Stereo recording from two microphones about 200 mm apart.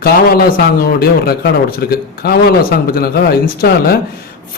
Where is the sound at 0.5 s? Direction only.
50° left (ahead or behind).